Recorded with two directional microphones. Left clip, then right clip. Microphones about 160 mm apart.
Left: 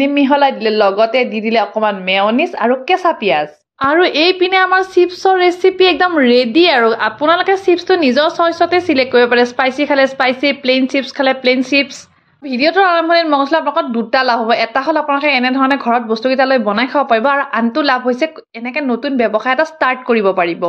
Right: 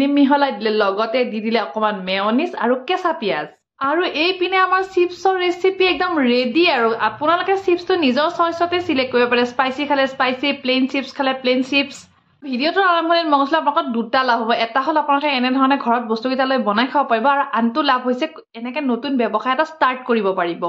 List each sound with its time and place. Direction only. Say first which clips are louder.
0.0 s a woman's voice: left 4 dB; 15° left (ahead or behind)
3.8 s a woman's voice: left 7 dB; 30° left (ahead or behind)